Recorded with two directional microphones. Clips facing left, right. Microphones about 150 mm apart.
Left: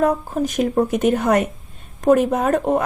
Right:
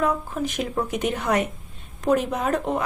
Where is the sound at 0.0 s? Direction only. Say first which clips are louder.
Left 5 dB; 40° left (ahead or behind).